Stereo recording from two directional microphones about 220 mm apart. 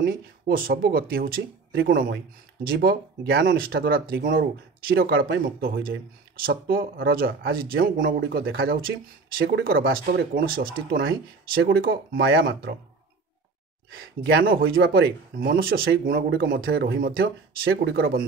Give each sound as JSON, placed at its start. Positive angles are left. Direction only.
{"t": 0.0, "sound": "speech", "side_deg": -40}
{"t": 2.6, "sound": "speech", "side_deg": -45}
{"t": 13.9, "sound": "speech", "side_deg": -45}